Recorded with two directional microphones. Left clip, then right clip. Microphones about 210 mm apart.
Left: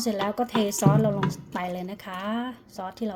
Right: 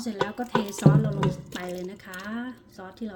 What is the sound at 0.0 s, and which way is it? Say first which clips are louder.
Speech: left 3 dB; 25° left (ahead or behind).